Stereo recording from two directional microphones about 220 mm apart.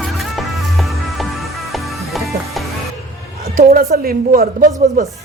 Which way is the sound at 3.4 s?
40° right (ahead or behind).